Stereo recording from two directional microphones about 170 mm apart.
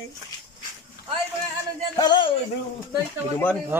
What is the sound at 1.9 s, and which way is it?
Speech, 25° left (ahead or behind).